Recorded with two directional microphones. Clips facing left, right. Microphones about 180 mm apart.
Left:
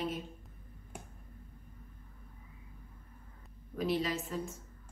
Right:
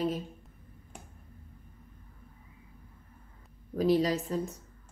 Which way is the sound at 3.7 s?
40° right (ahead or behind).